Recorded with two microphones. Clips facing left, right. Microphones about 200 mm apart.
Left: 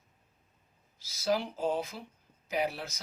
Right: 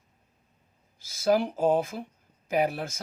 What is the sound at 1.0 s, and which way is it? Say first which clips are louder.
Speech: right 7 dB; 50° right (ahead or behind).